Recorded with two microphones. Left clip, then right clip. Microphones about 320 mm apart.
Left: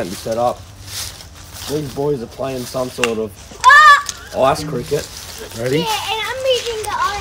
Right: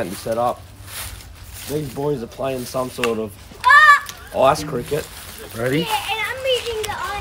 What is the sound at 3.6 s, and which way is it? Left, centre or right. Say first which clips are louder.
Honk: left 3 dB; centre.